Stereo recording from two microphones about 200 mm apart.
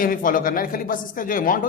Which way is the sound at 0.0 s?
45° left (ahead or behind).